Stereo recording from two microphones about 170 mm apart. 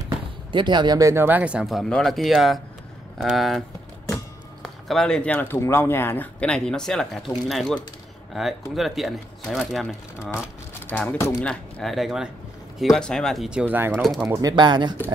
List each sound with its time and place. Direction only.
0.0 s speech: 30° right (ahead or behind); by 3.6 s centre (ahead or behind)
4.8 s speech: 5° left (ahead or behind)
10.4 s speech: 10° left (ahead or behind)
11.4 s speech: centre (ahead or behind)
13.9 s speech: centre (ahead or behind)
14.2 s speech: 15° right (ahead or behind)
14.5 s speech: 25° right (ahead or behind)